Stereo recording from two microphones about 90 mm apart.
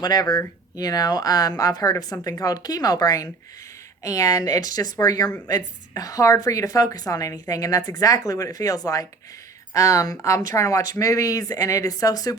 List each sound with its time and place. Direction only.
0.0 s a woman's voice: 45° left (ahead or behind)